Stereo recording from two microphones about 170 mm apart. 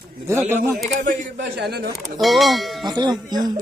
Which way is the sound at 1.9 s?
Centre (ahead or behind).